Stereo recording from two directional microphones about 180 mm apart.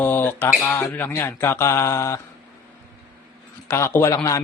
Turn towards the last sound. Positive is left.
turn(degrees=20)  # may be behind; listen again after turning